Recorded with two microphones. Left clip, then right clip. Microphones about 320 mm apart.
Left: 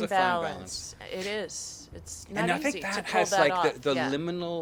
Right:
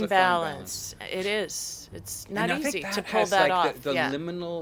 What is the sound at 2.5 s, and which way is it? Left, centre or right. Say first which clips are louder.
Speech: even; left.